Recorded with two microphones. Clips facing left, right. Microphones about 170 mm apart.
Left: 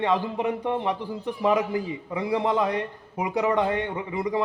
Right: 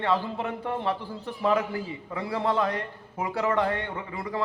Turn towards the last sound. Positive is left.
turn(degrees=15)  # may be behind; listen again after turning